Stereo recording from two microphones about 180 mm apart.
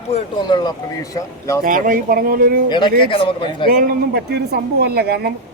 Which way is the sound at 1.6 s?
50° right (ahead or behind).